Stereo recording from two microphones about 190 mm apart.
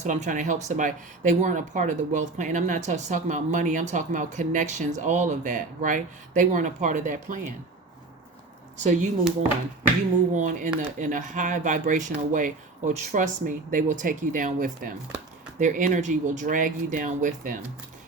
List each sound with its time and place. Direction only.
0.0 s speech: 40° right (ahead or behind)
8.8 s speech: 40° right (ahead or behind)
10.3 s speech: 40° right (ahead or behind)